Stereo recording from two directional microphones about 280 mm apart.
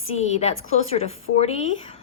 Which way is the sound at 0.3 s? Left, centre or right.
Left.